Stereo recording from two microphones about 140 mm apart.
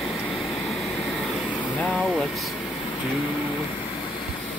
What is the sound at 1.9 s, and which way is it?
Speech, centre (ahead or behind).